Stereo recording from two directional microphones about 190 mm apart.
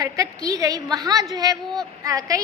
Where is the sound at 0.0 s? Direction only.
20° right (ahead or behind).